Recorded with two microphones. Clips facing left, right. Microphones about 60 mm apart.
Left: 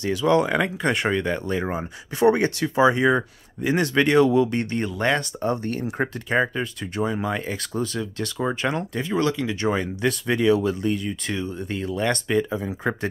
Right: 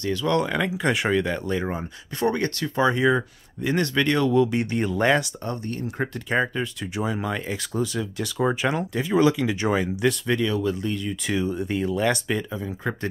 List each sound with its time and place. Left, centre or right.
0.0 s speech: centre
4.5 s speech: centre
5.4 s speech: centre
6.3 s speech: centre
9.1 s speech: centre
9.7 s speech: centre
11.2 s speech: centre
12.4 s speech: centre